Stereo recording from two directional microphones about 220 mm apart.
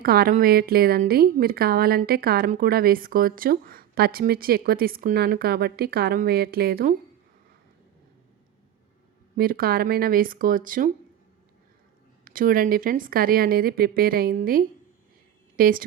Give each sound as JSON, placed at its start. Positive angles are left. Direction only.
{"t": 0.0, "sound": "a woman's voice", "side_deg": -45}
{"t": 9.3, "sound": "speech", "side_deg": -40}
{"t": 12.2, "sound": "speech", "side_deg": -40}